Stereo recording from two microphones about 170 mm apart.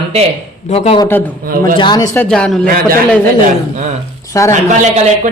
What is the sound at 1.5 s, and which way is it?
Speech, 55° right (ahead or behind).